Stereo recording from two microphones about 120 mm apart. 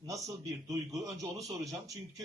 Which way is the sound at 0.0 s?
30° right (ahead or behind).